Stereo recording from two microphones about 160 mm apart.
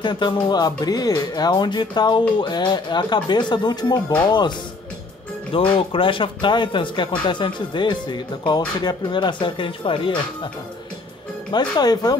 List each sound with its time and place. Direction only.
0.0 s speech: 30° left (ahead or behind)
11.5 s speech: 25° left (ahead or behind)